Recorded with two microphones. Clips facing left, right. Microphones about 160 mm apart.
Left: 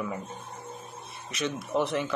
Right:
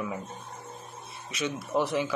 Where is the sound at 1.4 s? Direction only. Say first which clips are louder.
Even; centre (ahead or behind).